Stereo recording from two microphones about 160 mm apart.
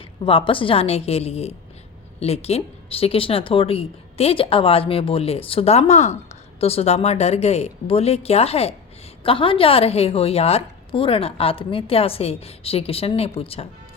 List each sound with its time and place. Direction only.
0.0 s a woman's voice: 35° left (ahead or behind)